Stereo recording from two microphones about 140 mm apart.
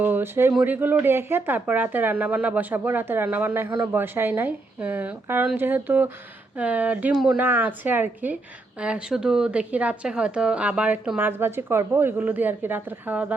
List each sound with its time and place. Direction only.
0.0 s speech: 15° right (ahead or behind)